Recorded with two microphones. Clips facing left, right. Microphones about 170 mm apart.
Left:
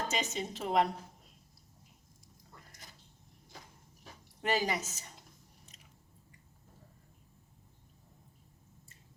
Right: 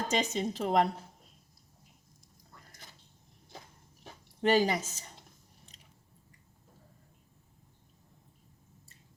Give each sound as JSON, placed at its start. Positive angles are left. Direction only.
{"t": 0.1, "sound": "a woman's voice", "side_deg": -35}
{"t": 4.0, "sound": "speech", "side_deg": -30}